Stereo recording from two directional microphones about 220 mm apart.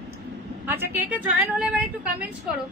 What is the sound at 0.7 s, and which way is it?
A woman's voice, 10° right (ahead or behind).